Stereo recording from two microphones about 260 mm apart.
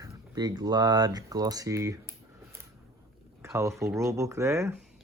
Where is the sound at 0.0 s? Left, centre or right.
Centre.